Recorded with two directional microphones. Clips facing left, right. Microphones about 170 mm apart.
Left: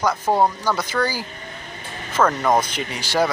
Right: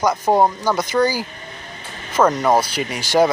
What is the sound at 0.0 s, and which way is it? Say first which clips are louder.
Speech: right 3 dB; 15° right (ahead or behind).